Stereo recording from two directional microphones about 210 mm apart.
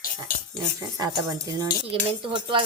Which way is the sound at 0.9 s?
15° right (ahead or behind).